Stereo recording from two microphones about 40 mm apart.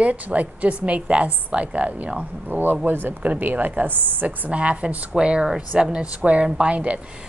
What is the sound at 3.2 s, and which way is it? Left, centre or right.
Speech, right.